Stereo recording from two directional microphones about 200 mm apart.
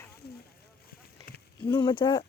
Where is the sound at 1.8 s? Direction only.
20° left (ahead or behind).